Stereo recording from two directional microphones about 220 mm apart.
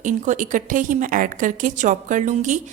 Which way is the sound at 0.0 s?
35° right (ahead or behind).